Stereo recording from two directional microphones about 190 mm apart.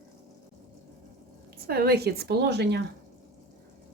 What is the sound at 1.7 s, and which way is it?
Speech, 55° right (ahead or behind).